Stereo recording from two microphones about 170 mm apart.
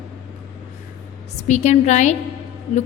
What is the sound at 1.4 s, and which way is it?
Speech, 40° left (ahead or behind).